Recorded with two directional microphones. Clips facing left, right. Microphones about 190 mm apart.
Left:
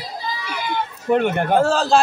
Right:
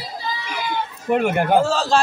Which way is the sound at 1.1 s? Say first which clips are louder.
Even; 5° right (ahead or behind).